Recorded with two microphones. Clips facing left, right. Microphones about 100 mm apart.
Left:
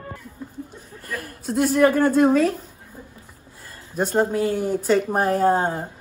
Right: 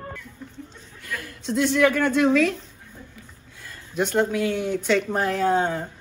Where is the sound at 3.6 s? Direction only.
35° left (ahead or behind).